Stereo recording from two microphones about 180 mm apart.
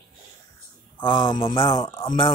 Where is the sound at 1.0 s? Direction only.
25° left (ahead or behind).